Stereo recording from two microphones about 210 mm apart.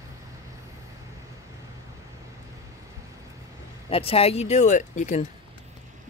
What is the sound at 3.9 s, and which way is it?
Speech, 25° left (ahead or behind).